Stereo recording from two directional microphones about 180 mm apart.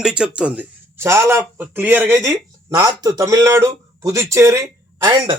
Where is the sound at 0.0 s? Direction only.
5° right (ahead or behind).